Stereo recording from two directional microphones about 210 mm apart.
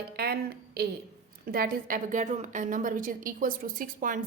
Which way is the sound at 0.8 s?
45° right (ahead or behind).